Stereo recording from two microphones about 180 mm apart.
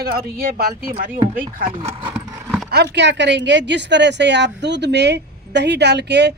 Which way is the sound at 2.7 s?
65° right (ahead or behind).